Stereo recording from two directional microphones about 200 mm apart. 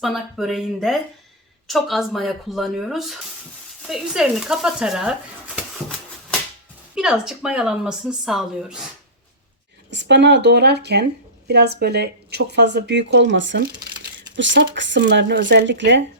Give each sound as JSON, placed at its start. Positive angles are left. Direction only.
{"t": 0.0, "sound": "speech", "side_deg": 0}
{"t": 6.9, "sound": "speech", "side_deg": -5}
{"t": 9.9, "sound": "speech", "side_deg": -60}